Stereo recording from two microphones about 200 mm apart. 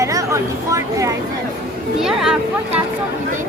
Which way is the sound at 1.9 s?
5° right (ahead or behind).